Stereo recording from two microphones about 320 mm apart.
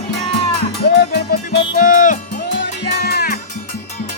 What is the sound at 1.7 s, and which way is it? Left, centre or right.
Speech, left.